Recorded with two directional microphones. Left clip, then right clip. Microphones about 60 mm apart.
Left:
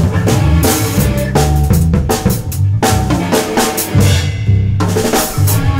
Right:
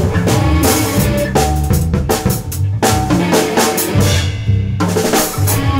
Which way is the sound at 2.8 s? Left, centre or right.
Centre.